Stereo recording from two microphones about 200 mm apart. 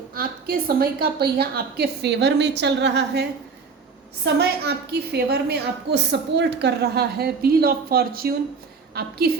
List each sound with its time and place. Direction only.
0.1 s a woman's voice: 50° right (ahead or behind)
4.4 s a woman's voice: 55° right (ahead or behind)